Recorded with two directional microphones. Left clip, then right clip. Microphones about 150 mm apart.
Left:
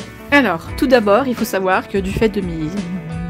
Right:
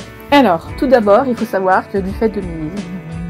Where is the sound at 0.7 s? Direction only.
85° left.